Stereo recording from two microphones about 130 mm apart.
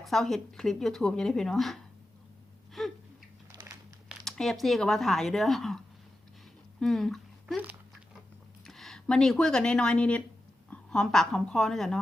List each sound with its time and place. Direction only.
0.0 s speech: centre (ahead or behind)
2.8 s a sound: centre (ahead or behind)
3.5 s crumpling: 30° right (ahead or behind)
4.1 s speech: centre (ahead or behind)
8.6 s a woman's voice: centre (ahead or behind)